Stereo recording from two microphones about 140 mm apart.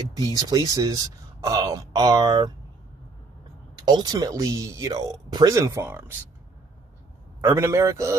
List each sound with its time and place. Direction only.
0.1 s speech: 30° right (ahead or behind)
3.8 s speech: 30° right (ahead or behind)
7.4 s speech: 20° right (ahead or behind)